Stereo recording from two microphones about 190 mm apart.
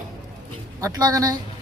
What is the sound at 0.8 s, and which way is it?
Speech, 20° right (ahead or behind).